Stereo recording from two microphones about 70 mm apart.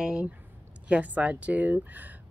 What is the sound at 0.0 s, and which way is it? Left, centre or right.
Speech, centre.